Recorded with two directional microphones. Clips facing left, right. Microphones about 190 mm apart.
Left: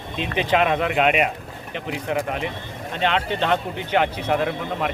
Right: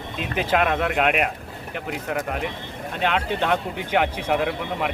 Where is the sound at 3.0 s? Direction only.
10° right (ahead or behind).